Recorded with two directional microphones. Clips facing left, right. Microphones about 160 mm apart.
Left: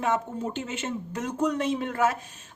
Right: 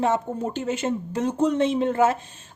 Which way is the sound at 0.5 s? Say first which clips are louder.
Right 6 dB; 40° right (ahead or behind).